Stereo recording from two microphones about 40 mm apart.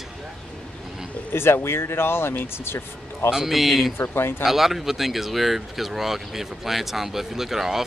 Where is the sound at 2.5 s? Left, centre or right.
Left.